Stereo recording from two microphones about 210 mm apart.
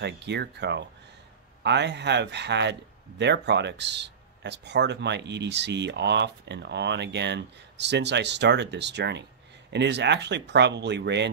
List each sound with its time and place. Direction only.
0.0 s speech: 55° right (ahead or behind)